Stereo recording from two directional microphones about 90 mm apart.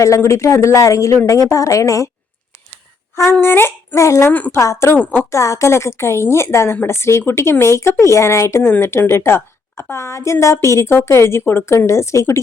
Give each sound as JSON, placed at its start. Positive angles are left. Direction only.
{"t": 0.0, "sound": "a woman's voice", "side_deg": 35}
{"t": 3.4, "sound": "a woman's voice", "side_deg": 25}
{"t": 4.3, "sound": "a woman's voice", "side_deg": 20}
{"t": 4.6, "sound": "a woman's voice", "side_deg": 30}